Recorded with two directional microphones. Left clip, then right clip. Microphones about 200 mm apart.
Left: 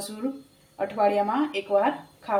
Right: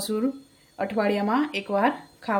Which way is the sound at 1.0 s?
45° right (ahead or behind).